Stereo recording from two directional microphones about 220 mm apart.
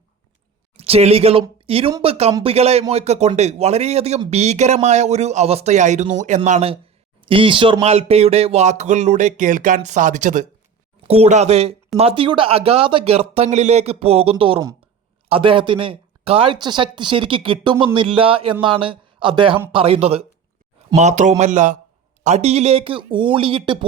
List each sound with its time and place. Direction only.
0.8 s a man's voice: 30° right (ahead or behind)